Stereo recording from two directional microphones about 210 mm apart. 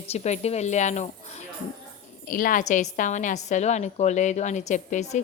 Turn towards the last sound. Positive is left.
turn(degrees=35)  # may be behind; listen again after turning